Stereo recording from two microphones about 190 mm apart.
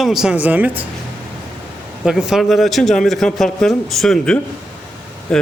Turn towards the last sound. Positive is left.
turn(degrees=5)  # may be behind; listen again after turning